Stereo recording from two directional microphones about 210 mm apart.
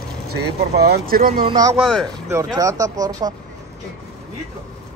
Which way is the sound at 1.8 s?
Centre (ahead or behind).